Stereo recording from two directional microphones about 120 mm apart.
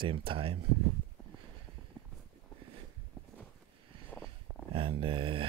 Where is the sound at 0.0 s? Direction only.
45° right (ahead or behind).